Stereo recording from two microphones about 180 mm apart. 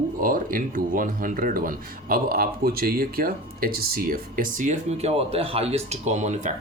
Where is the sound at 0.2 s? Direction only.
50° right (ahead or behind).